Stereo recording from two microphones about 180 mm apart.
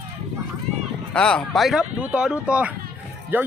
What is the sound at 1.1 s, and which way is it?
A man's voice, 5° left (ahead or behind).